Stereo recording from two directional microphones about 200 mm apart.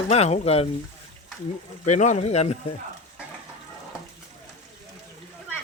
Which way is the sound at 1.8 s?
35° left (ahead or behind).